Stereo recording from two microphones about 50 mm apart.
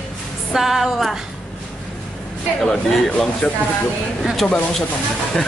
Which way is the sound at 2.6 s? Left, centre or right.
Centre.